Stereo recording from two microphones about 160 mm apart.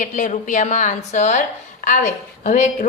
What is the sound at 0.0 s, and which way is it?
A woman's voice, 50° left (ahead or behind).